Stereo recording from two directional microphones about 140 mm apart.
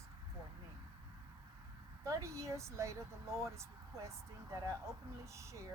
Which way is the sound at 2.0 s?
20° right (ahead or behind).